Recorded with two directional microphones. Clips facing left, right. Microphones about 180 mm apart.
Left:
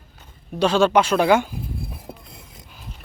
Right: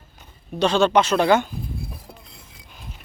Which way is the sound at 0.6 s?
5° left (ahead or behind).